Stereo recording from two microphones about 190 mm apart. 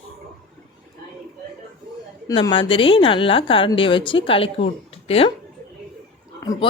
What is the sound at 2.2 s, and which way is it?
Speech, 20° left (ahead or behind).